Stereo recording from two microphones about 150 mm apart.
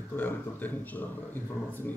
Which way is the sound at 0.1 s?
10° left (ahead or behind).